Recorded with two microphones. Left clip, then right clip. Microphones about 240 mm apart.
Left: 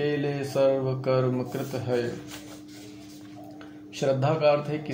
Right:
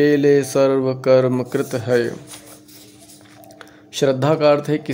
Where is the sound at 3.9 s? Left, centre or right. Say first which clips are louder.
Right 8 dB; right.